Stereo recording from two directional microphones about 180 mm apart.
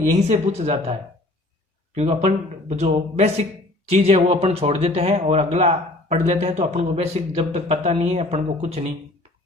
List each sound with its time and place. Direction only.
0.3 s speech: 40° right (ahead or behind)
2.0 s speech: 35° right (ahead or behind)